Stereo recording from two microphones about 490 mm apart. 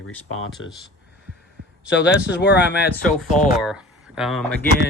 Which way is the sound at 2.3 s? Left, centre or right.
Left.